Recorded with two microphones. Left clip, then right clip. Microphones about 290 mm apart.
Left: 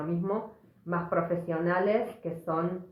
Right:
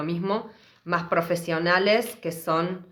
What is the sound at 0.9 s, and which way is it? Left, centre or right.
Speech, right.